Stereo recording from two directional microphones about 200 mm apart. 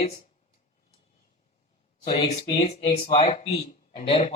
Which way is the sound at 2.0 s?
30° left (ahead or behind).